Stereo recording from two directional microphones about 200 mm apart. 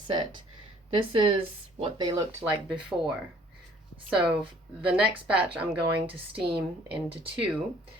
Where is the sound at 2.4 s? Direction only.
5° right (ahead or behind).